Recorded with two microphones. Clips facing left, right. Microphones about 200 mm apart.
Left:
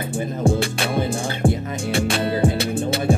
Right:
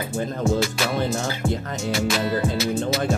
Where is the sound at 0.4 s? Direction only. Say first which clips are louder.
Left 2 dB; 30° left (ahead or behind).